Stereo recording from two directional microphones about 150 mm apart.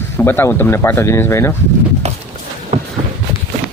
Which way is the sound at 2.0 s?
45° right (ahead or behind).